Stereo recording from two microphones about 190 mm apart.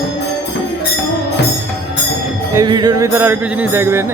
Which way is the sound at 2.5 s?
20° right (ahead or behind).